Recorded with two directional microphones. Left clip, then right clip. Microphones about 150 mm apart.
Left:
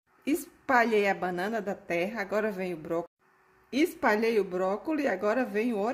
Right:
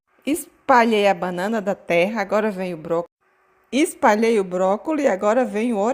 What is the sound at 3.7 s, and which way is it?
Speech, 50° right (ahead or behind).